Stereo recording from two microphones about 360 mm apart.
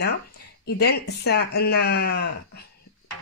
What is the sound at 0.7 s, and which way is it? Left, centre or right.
Speech, left.